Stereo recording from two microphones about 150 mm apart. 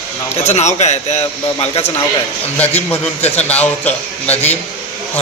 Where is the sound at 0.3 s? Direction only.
45° left (ahead or behind).